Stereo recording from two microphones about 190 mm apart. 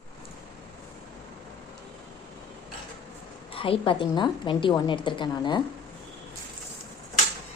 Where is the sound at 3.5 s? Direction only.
30° left (ahead or behind).